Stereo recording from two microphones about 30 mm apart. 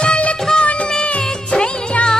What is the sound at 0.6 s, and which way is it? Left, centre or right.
Music, left.